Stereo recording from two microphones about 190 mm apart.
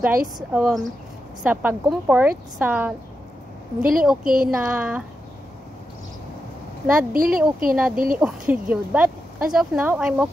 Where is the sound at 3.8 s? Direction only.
50° right (ahead or behind).